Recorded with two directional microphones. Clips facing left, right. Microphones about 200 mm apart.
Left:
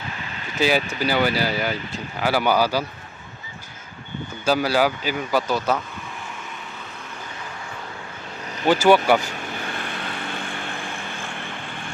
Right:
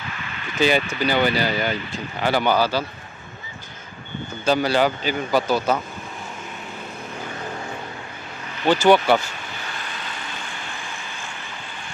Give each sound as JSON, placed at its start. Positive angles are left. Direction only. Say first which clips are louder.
{"t": 0.6, "sound": "a man's voice", "louder": "right 1 dB", "side_deg": 5}
{"t": 4.4, "sound": "a man's voice", "louder": "right 1 dB", "side_deg": 5}
{"t": 8.6, "sound": "speech", "louder": "even", "side_deg": 10}
{"t": 9.6, "sound": "vehicle", "louder": "left 4 dB", "side_deg": 55}